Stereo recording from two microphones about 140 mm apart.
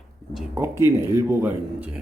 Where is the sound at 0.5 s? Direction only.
20° right (ahead or behind).